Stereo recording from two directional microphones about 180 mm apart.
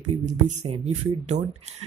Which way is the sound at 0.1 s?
40° right (ahead or behind).